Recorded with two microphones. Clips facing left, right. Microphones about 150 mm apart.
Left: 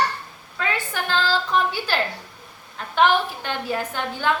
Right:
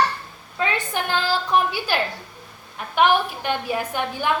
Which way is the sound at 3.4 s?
15° right (ahead or behind).